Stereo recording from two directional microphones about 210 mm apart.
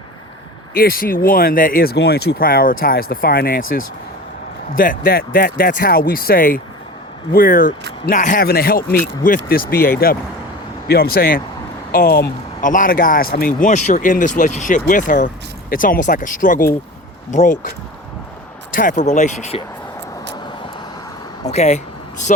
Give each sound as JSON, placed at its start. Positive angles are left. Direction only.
{"t": 0.7, "sound": "speech", "side_deg": 45}
{"t": 4.7, "sound": "speech", "side_deg": 40}
{"t": 18.7, "sound": "speech", "side_deg": 40}
{"t": 21.5, "sound": "speech", "side_deg": 30}